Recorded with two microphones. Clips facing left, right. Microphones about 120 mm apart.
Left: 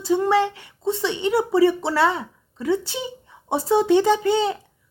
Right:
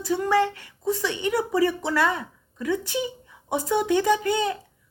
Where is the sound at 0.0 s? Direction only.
25° left (ahead or behind).